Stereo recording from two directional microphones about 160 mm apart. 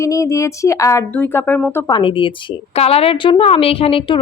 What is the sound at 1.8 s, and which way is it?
A woman's voice, 30° left (ahead or behind).